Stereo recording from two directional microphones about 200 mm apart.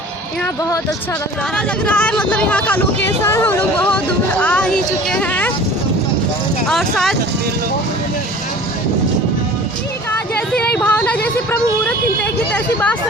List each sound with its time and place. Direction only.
1.5 s speech: 5° left (ahead or behind)
6.7 s speech: centre (ahead or behind)
10.1 s speech: 5° left (ahead or behind)